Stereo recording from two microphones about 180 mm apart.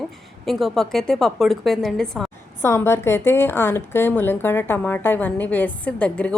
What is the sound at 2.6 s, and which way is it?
A woman's voice, 15° left (ahead or behind).